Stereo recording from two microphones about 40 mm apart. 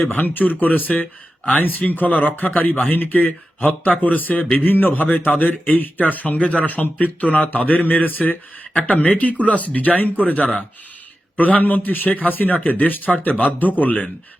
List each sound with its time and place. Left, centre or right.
0.0 s speech: left